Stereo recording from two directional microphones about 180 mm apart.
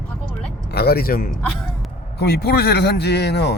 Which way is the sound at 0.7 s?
60° left (ahead or behind).